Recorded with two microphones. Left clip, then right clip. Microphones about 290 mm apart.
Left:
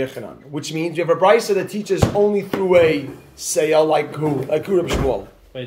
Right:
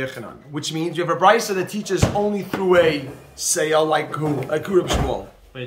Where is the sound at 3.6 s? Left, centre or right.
Right.